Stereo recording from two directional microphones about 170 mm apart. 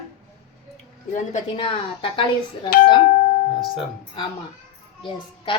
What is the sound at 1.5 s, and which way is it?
Speech, 30° left (ahead or behind).